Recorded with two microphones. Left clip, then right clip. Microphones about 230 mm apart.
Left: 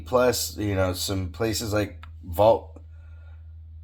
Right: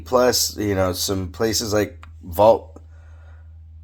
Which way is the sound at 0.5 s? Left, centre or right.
Right.